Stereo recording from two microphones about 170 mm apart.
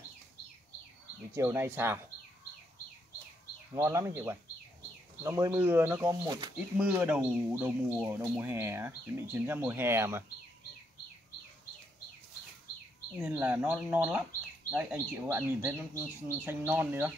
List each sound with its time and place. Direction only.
1.3 s speech: 15° right (ahead or behind)
3.7 s speech: 15° right (ahead or behind)
6.8 s speech: 10° right (ahead or behind)
13.2 s speech: 10° right (ahead or behind)